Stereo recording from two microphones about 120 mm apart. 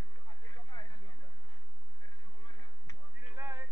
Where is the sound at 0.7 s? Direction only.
40° left (ahead or behind).